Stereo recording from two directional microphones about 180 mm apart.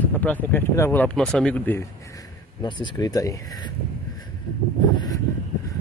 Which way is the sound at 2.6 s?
25° left (ahead or behind).